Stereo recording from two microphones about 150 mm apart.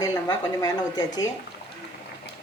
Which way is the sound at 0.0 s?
25° left (ahead or behind).